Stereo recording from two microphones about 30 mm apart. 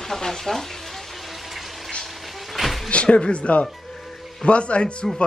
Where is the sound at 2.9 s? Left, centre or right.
Left.